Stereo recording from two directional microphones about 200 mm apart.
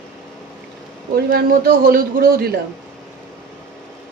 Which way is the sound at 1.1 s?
50° right (ahead or behind).